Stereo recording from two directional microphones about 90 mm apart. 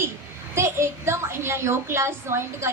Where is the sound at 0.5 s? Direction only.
30° right (ahead or behind).